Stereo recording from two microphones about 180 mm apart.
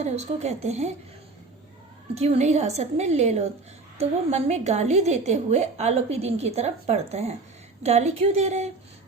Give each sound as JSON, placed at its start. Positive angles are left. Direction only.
{"t": 0.0, "sound": "a woman's voice", "side_deg": -40}
{"t": 2.1, "sound": "a woman's voice", "side_deg": -35}